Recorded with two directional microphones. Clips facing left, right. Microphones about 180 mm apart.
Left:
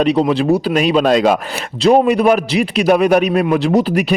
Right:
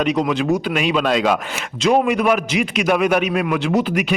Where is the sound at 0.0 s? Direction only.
35° left (ahead or behind).